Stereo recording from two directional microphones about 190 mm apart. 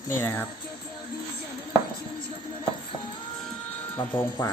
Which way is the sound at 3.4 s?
10° left (ahead or behind).